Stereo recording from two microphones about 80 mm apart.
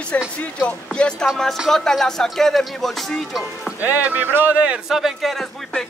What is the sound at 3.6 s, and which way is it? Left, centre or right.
Speech, centre.